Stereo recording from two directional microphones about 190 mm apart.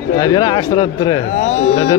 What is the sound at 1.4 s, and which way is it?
Speech, 35° left (ahead or behind).